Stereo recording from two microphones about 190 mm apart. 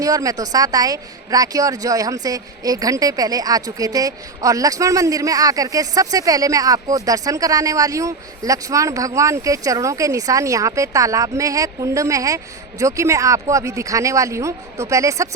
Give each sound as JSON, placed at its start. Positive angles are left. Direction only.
{"t": 0.0, "sound": "speech", "side_deg": -20}